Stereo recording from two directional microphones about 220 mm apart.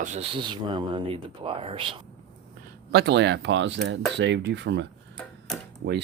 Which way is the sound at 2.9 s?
50° right (ahead or behind).